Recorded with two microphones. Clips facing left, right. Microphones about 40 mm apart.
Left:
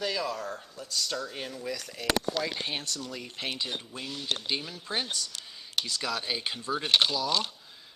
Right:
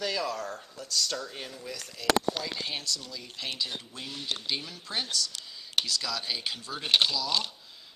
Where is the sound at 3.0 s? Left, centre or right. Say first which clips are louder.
Left 3 dB; left.